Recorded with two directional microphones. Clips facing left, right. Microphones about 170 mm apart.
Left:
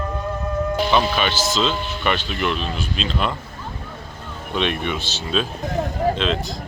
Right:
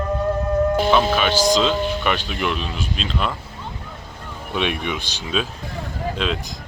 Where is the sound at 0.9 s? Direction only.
5° right (ahead or behind).